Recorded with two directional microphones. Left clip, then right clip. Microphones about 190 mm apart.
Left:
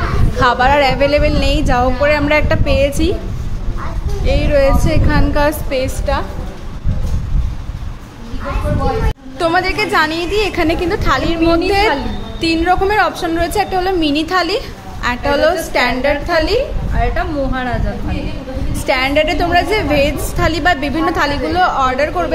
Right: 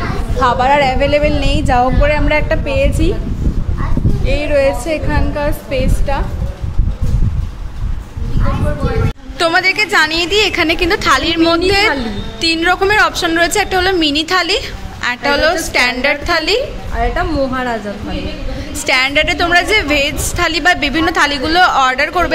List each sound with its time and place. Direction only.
0.4 s a woman's voice: 5° left (ahead or behind)
4.2 s a woman's voice: centre (ahead or behind)
5.7 s a woman's voice: centre (ahead or behind)
9.4 s a woman's voice: 5° left (ahead or behind)
17.0 s a woman's voice: 50° right (ahead or behind)
18.9 s a woman's voice: 5° left (ahead or behind)